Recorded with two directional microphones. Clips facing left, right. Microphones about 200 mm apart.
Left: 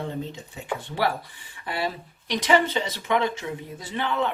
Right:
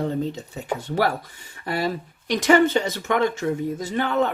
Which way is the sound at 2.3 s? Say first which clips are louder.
Right 5 dB; 50° right (ahead or behind).